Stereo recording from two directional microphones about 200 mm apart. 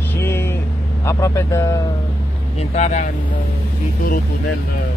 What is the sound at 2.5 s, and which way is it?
Speech, 35° left (ahead or behind).